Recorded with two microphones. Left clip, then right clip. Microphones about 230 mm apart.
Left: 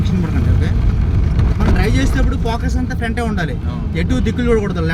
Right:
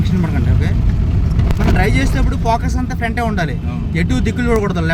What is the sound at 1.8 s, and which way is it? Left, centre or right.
Speech, centre.